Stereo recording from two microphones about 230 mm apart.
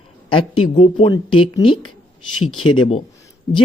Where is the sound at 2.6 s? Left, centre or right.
Left.